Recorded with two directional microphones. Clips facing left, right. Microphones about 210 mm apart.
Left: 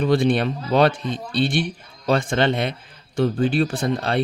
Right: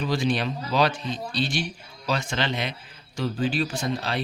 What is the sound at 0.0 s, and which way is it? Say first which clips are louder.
Speech: left 7 dB; 55° left (ahead or behind).